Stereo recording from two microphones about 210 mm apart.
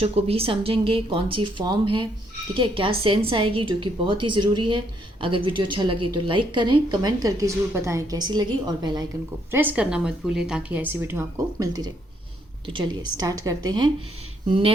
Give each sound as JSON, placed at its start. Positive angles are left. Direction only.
{"t": 0.0, "sound": "a woman's voice", "side_deg": -30}
{"t": 9.5, "sound": "a woman's voice", "side_deg": -10}